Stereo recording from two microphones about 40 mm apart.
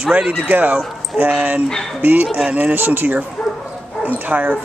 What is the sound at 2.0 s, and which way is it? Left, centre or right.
Speech, right.